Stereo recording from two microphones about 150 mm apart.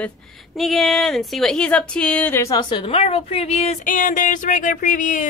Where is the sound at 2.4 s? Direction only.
30° left (ahead or behind).